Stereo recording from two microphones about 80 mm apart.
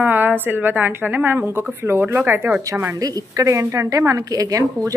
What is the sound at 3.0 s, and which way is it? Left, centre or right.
A woman's voice, right.